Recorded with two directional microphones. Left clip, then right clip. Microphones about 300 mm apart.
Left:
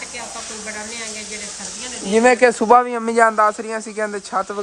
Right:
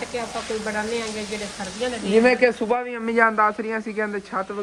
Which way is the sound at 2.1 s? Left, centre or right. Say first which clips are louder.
Left 4 dB; left.